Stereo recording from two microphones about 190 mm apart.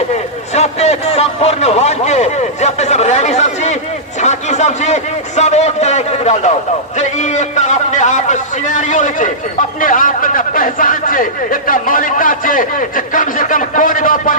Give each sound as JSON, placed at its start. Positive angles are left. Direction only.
{"t": 0.5, "sound": "a man's voice", "side_deg": 35}
{"t": 4.2, "sound": "a sound", "side_deg": 35}
{"t": 5.4, "sound": "a man's voice", "side_deg": 35}